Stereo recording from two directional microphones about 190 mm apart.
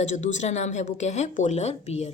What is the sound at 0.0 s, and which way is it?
Speech, 40° left (ahead or behind).